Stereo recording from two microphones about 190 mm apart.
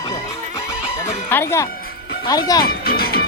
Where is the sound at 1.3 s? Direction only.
10° left (ahead or behind).